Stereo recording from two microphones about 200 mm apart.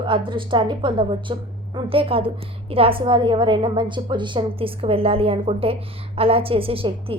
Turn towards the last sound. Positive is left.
turn(degrees=-25)  # may be behind; listen again after turning